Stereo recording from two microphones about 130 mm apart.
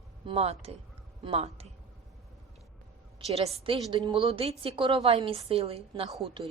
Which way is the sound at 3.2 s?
55° right (ahead or behind).